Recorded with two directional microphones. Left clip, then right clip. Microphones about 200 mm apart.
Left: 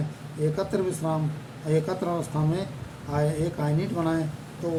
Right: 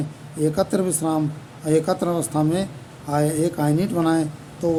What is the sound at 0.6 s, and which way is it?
Speech, 60° right (ahead or behind).